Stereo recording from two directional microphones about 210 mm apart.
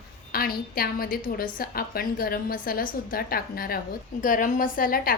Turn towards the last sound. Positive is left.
turn(degrees=45)  # may be behind; listen again after turning